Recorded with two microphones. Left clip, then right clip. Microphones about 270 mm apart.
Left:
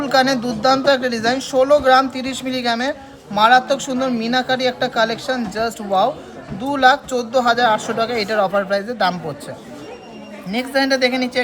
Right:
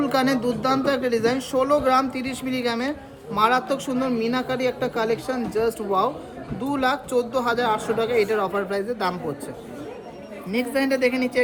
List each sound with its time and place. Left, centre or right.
0.0 s a sound: left
0.6 s speech: left
10.5 s speech: left